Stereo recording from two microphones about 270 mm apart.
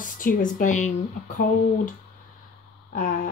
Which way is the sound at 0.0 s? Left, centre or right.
Left.